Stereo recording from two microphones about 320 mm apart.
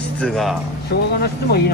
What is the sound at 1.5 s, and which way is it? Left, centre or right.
Speech, left.